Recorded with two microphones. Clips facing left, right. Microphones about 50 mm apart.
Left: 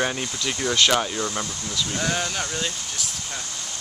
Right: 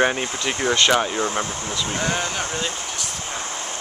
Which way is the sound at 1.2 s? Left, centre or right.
Right.